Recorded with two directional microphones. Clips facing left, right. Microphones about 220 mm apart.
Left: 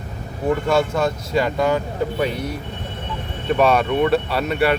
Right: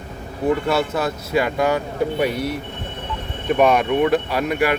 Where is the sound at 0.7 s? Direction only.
5° right (ahead or behind).